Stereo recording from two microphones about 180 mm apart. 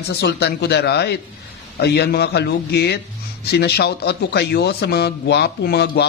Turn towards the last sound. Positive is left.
turn(degrees=65)  # may be behind; listen again after turning